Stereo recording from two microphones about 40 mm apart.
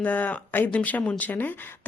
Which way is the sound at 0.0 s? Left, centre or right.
Left.